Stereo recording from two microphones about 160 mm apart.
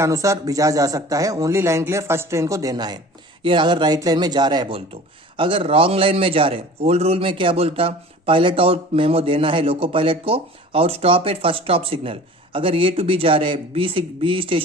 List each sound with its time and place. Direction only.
0.0 s a man's voice: 20° right (ahead or behind)